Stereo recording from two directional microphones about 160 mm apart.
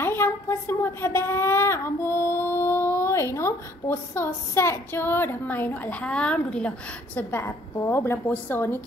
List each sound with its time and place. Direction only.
0.0 s a woman's voice: 15° left (ahead or behind)